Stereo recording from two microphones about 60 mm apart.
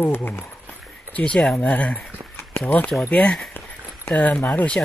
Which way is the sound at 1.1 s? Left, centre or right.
Centre.